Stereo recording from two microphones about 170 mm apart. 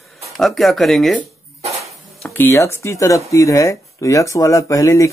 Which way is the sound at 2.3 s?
15° left (ahead or behind).